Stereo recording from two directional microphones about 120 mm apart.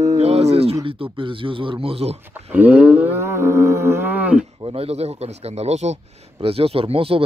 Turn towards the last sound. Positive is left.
turn(degrees=-50)  # may be behind; listen again after turning